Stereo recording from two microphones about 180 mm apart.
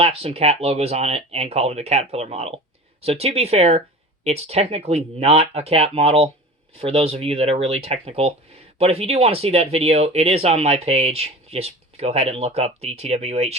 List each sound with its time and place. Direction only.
0.0 s speech: 35° right (ahead or behind)